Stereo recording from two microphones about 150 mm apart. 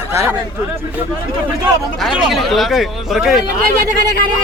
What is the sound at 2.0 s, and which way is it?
Speech, centre (ahead or behind).